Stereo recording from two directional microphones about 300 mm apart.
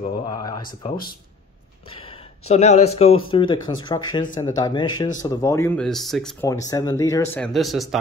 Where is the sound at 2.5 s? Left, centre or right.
Left.